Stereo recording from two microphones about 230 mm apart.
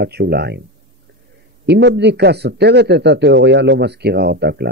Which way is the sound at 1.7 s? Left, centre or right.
Right.